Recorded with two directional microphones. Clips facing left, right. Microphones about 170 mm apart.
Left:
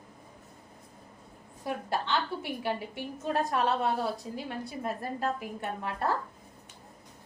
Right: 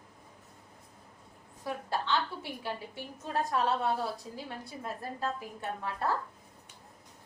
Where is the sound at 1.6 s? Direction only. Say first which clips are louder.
Left 2 dB; 15° left (ahead or behind).